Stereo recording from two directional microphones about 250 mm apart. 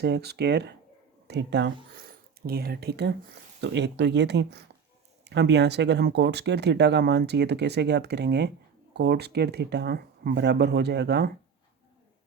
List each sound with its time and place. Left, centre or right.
0.0 s speech: right